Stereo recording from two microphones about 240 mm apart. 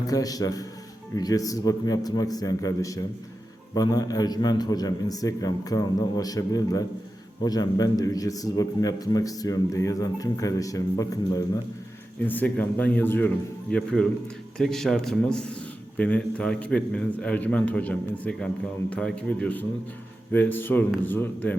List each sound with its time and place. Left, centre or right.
0.1 s a man's voice: centre